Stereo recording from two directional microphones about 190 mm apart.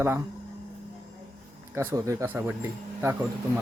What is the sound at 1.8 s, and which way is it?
Music, 15° right (ahead or behind).